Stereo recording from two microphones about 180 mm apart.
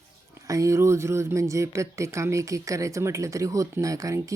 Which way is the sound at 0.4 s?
15° right (ahead or behind).